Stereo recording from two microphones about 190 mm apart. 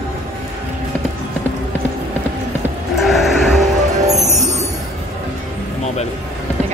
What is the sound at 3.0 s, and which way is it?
Music, centre (ahead or behind).